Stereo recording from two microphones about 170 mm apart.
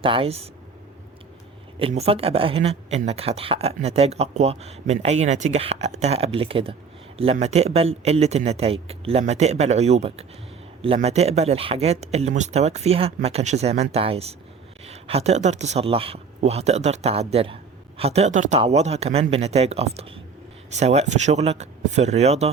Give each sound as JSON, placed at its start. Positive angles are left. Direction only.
{"t": 0.0, "sound": "speech", "side_deg": -30}
{"t": 1.8, "sound": "speech", "side_deg": -35}